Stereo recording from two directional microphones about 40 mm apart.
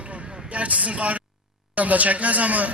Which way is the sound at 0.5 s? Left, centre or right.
Right.